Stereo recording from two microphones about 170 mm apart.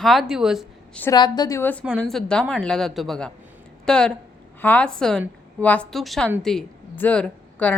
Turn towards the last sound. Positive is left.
turn(degrees=5)  # may be behind; listen again after turning